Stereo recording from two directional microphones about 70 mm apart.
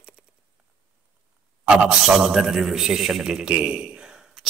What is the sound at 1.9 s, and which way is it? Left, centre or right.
A man's voice, centre.